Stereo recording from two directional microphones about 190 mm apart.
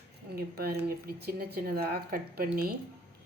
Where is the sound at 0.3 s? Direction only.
55° right (ahead or behind).